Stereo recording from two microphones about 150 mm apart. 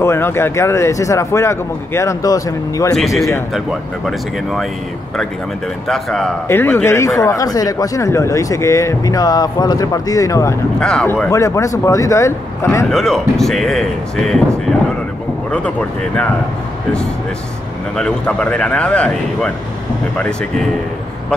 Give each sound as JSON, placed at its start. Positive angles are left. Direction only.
{"t": 0.0, "sound": "speech", "side_deg": 15}
{"t": 2.9, "sound": "speech", "side_deg": 0}
{"t": 5.9, "sound": "speech", "side_deg": 0}
{"t": 6.4, "sound": "speech", "side_deg": 15}
{"t": 10.8, "sound": "speech", "side_deg": 5}
{"t": 11.2, "sound": "speech", "side_deg": 20}
{"t": 12.9, "sound": "speech", "side_deg": 0}
{"t": 15.5, "sound": "speech", "side_deg": 10}
{"t": 17.9, "sound": "speech", "side_deg": 5}